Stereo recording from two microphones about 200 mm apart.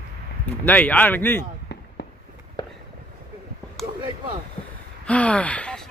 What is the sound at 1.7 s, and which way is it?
Fireworks, 60° left (ahead or behind).